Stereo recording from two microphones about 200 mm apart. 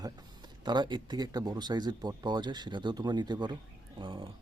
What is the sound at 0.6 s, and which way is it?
Speech, 20° right (ahead or behind).